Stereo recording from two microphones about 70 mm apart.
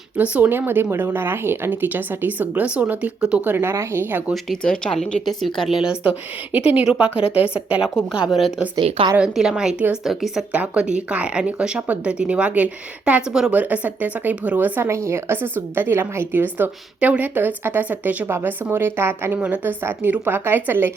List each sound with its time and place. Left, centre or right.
0.2 s a woman's voice: right
3.4 s a woman's voice: right
4.6 s speech: centre
5.8 s a woman's voice: centre
8.3 s a woman's voice: centre
10.5 s a woman's voice: centre
13.2 s a woman's voice: centre
13.5 s a woman's voice: right
14.8 s a woman's voice: right
18.3 s a woman's voice: right
19.4 s a woman's voice: right